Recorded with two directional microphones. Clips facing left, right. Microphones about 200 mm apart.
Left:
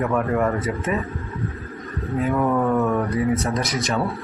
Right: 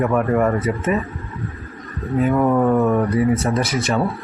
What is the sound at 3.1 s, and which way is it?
Speech, 5° right (ahead or behind).